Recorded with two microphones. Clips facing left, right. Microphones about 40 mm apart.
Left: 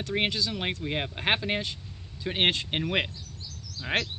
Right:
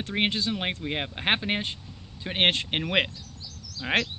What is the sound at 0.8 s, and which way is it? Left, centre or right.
Speech, centre.